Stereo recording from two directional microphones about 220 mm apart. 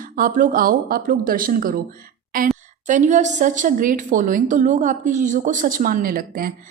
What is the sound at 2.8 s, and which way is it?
A woman's voice, 35° right (ahead or behind).